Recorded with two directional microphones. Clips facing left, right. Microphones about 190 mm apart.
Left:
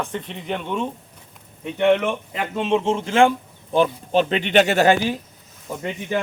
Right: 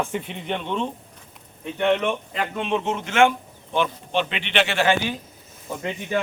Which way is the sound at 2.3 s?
25° left (ahead or behind).